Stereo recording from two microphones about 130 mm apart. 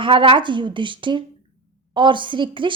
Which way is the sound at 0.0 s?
40° right (ahead or behind).